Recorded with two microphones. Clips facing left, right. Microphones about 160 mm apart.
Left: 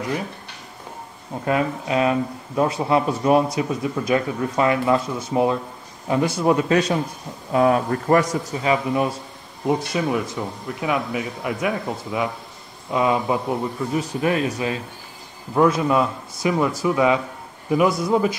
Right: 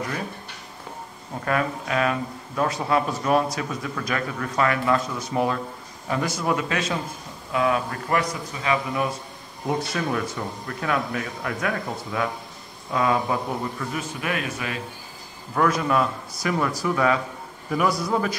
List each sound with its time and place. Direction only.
1.4 s speech: 20° left (ahead or behind)
9.7 s speech: 15° left (ahead or behind)
13.9 s speech: 30° left (ahead or behind)